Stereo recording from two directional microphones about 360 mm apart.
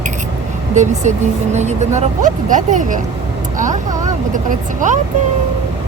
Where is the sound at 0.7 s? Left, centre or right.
Centre.